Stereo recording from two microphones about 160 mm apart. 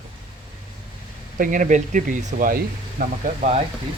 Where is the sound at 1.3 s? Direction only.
55° right (ahead or behind).